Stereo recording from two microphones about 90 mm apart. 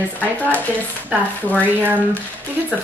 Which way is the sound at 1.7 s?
20° right (ahead or behind).